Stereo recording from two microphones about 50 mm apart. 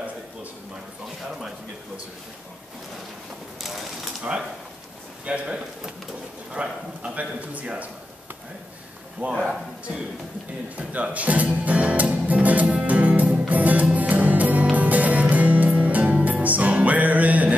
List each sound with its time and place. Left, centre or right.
5.2 s speech: right
9.2 s speech: right
10.8 s speech: right
12.8 s music: right